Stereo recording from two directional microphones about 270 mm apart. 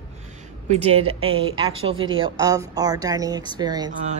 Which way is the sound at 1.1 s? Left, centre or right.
Right.